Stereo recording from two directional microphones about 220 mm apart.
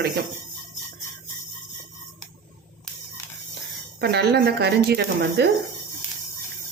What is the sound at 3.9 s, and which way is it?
Speech, 50° right (ahead or behind).